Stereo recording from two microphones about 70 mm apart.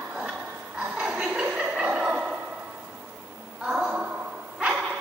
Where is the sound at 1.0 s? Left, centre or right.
Centre.